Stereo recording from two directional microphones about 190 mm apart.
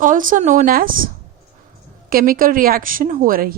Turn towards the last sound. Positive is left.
turn(degrees=-50)  # may be behind; listen again after turning